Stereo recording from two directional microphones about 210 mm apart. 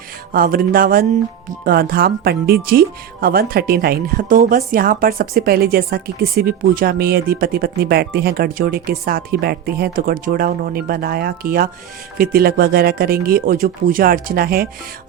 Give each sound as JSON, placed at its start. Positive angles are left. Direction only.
{"t": 0.3, "sound": "speech", "side_deg": -45}